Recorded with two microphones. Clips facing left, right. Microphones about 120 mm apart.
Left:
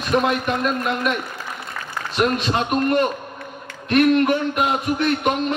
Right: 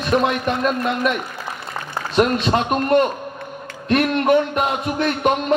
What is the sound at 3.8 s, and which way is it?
A man's voice, 35° right (ahead or behind).